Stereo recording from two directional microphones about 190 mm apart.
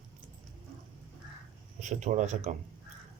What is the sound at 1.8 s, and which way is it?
Speech, 40° right (ahead or behind).